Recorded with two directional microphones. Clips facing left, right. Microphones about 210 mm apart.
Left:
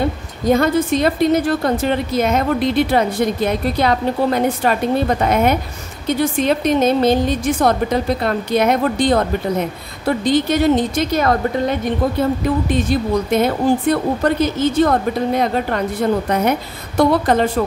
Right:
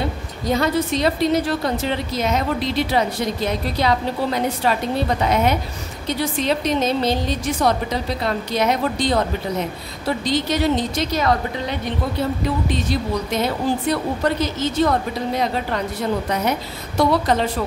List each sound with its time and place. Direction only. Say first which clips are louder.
0.5 s a woman's voice: left 5 dB; 50° left (ahead or behind)